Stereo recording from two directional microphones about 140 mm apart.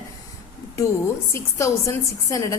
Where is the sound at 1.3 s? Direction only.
20° left (ahead or behind).